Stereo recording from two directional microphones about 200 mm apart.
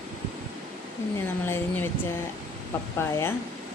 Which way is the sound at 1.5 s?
10° left (ahead or behind).